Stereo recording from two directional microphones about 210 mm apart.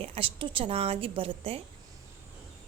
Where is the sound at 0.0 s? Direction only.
25° right (ahead or behind).